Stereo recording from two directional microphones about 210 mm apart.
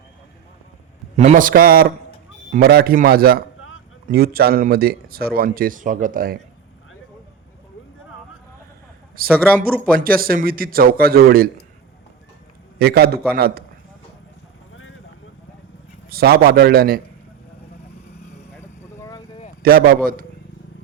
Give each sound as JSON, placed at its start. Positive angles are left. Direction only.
{"t": 1.1, "sound": "a man's voice", "side_deg": -35}
{"t": 9.2, "sound": "speech", "side_deg": -45}
{"t": 12.8, "sound": "speech", "side_deg": -50}
{"t": 16.0, "sound": "speech", "side_deg": -45}
{"t": 18.5, "sound": "vehicle", "side_deg": 15}
{"t": 19.6, "sound": "speech", "side_deg": -45}